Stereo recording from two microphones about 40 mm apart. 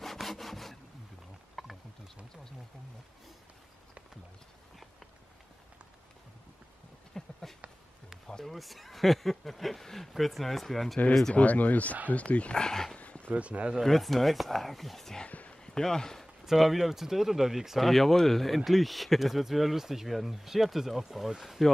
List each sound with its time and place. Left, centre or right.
0.0 s sawing: centre
1.5 s wild animals: centre
7.2 s a sound: centre
8.3 s speech: centre
8.5 s speech: centre
11.3 s speech: left
12.5 s speech: centre
12.9 s a sound: left
13.3 s speech: right
13.8 s speech: centre
15.2 s a sound: left
15.6 s speech: centre
16.4 s speech: centre
17.8 s speech: centre